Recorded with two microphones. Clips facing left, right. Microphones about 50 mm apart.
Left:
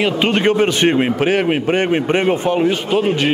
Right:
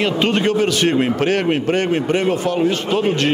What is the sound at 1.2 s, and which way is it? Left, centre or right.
A man's voice, centre.